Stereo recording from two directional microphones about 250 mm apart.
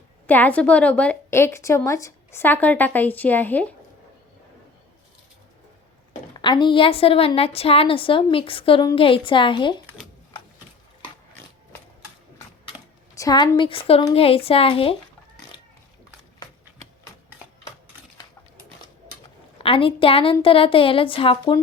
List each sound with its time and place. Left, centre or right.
0.3 s a woman's voice: centre
6.4 s a woman's voice: centre
13.1 s a woman's voice: centre
19.5 s a woman's voice: left